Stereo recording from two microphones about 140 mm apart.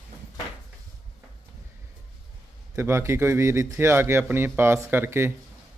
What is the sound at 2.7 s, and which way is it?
Speech, 20° right (ahead or behind).